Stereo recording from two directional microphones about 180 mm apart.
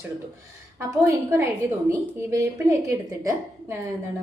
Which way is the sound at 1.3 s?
10° right (ahead or behind).